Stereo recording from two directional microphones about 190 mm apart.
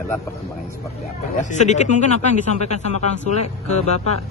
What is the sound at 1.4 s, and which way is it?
Speech, 40° left (ahead or behind).